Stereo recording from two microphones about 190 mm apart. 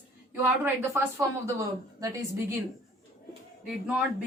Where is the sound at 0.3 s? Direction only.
15° right (ahead or behind).